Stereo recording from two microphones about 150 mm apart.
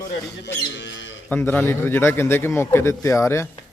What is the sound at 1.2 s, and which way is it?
A man's voice, 10° left (ahead or behind).